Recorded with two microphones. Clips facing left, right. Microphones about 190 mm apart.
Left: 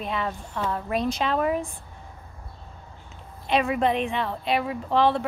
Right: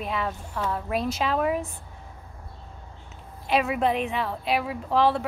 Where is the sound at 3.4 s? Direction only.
5° right (ahead or behind).